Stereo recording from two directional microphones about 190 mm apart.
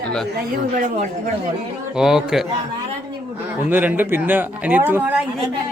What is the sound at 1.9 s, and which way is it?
Speech, 5° right (ahead or behind).